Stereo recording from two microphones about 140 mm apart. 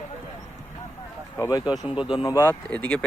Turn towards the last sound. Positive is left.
turn(degrees=10)  # may be behind; listen again after turning